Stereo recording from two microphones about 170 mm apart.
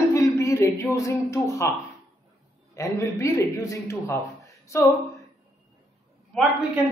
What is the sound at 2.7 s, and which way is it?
A man's voice, 20° left (ahead or behind).